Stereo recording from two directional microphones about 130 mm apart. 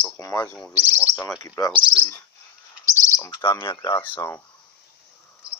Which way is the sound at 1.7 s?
40° right (ahead or behind).